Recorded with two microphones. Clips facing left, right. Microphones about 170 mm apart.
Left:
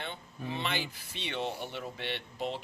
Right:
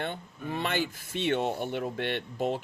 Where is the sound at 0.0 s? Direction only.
50° right (ahead or behind).